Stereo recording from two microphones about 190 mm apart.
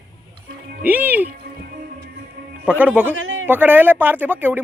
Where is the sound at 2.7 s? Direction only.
5° right (ahead or behind).